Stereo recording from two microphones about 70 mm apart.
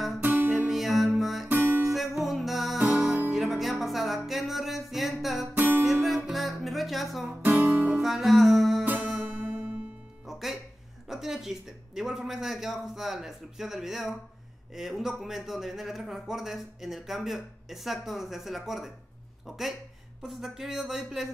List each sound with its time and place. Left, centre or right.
0.2 s music: right
0.7 s music: centre
1.5 s music: right
1.9 s music: centre
7.2 s guitar: right
7.9 s music: centre
9.2 s music: right
10.2 s music: centre
11.1 s speech: centre